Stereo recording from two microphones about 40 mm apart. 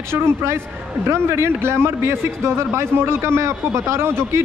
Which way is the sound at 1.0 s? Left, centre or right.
Right.